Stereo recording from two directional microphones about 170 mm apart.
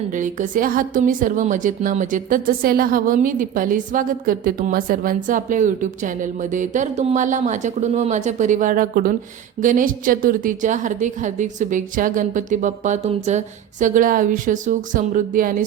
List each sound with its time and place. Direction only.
0.1 s a woman's voice: 50° right (ahead or behind)